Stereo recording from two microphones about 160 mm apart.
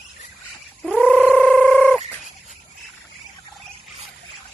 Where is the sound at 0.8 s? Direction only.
Centre (ahead or behind).